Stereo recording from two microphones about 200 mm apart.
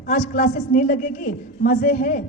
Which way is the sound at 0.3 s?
50° left (ahead or behind).